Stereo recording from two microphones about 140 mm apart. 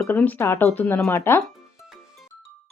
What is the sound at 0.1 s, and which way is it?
Speech, 15° left (ahead or behind).